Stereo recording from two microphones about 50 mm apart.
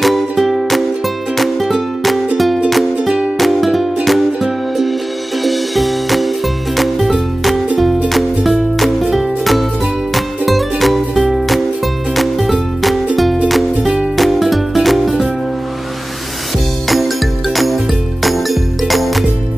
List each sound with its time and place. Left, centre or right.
0.0 s music: centre
3.0 s music: centre
3.3 s music: centre
16.8 s music: centre